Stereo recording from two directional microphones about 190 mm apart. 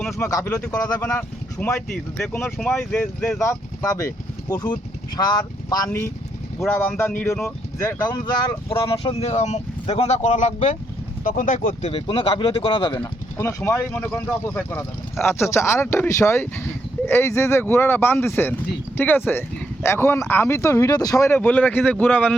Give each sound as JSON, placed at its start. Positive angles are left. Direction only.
{"t": 0.0, "sound": "speech", "side_deg": 15}
{"t": 13.0, "sound": "speech", "side_deg": 15}